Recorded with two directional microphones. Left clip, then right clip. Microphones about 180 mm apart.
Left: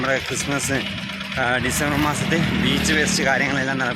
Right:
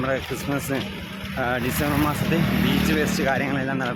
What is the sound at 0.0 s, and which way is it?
Speech, 5° left (ahead or behind).